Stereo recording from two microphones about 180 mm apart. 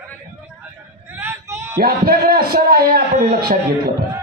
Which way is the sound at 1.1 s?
15° right (ahead or behind).